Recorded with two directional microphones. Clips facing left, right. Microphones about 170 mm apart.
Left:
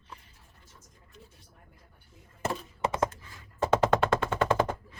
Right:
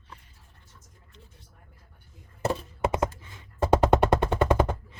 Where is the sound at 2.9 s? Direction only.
20° right (ahead or behind).